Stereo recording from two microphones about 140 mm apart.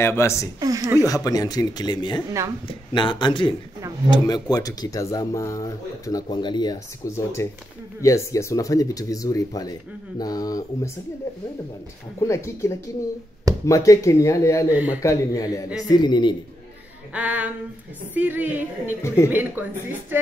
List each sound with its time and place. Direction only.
0.0 s speech: 20° left (ahead or behind)
0.6 s a woman's voice: 25° right (ahead or behind)
1.0 s speech: 25° left (ahead or behind)
12.2 s speech: 20° left (ahead or behind)
17.1 s a woman's voice: 10° right (ahead or behind)
19.0 s speech: 20° left (ahead or behind)
19.3 s a woman's voice: 15° right (ahead or behind)